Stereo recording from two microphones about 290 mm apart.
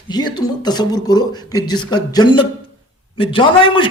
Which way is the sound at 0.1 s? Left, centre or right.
Centre.